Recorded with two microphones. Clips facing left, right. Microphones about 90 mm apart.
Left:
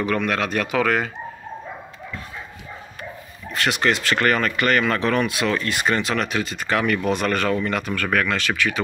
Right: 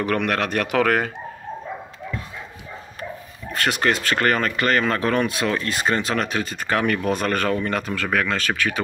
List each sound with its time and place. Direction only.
0.0 s speech: 50° right (ahead or behind)
3.5 s speech: 40° right (ahead or behind)
7.9 s speech: 25° right (ahead or behind)
8.4 s speech: 40° right (ahead or behind)